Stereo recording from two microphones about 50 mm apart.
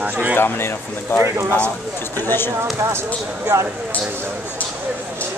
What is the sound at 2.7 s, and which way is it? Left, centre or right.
Speech, right.